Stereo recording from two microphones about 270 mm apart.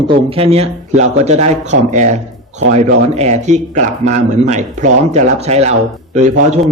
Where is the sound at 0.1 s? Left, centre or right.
Right.